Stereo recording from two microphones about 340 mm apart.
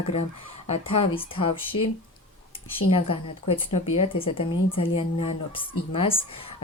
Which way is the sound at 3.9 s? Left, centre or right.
Centre.